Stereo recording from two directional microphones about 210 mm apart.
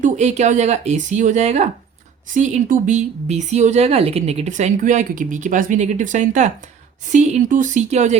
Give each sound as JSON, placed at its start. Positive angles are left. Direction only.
{"t": 0.0, "sound": "speech", "side_deg": -35}